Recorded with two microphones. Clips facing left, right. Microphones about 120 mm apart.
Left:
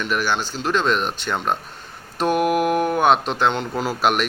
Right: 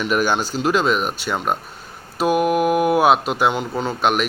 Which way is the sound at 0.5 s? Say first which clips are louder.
Right 2 dB; 10° right (ahead or behind).